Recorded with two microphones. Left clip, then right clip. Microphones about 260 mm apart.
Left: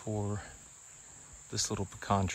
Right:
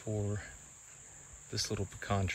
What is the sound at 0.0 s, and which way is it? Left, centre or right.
Cricket, left.